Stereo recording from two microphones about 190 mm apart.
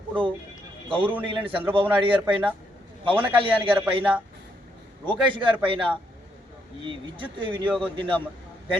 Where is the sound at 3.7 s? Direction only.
10° right (ahead or behind).